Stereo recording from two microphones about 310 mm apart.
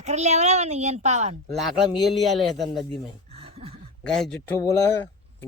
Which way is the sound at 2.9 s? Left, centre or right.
Centre.